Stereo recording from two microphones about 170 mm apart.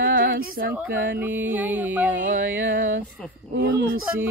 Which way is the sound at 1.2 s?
10° right (ahead or behind).